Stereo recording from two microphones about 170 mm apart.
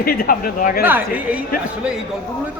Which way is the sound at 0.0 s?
60° left (ahead or behind).